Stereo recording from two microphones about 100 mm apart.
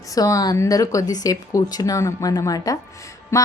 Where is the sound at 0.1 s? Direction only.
35° left (ahead or behind).